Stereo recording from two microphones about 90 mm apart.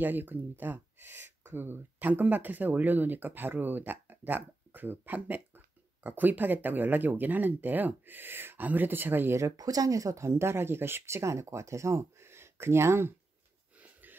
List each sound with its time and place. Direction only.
0.0 s speech: 20° right (ahead or behind)
9.6 s speech: 45° right (ahead or behind)